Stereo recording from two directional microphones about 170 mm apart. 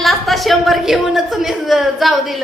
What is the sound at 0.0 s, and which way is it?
A woman's voice, centre (ahead or behind).